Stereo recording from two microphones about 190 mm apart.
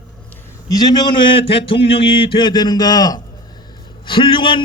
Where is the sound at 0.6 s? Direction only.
20° left (ahead or behind).